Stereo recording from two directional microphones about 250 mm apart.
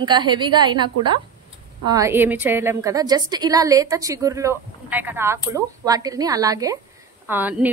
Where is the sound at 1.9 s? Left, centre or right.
Centre.